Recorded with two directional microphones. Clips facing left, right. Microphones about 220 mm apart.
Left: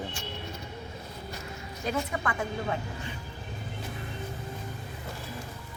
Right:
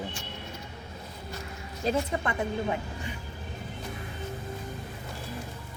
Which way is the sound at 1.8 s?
25° right (ahead or behind).